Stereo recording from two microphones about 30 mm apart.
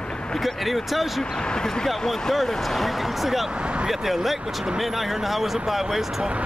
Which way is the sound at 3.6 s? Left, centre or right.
Right.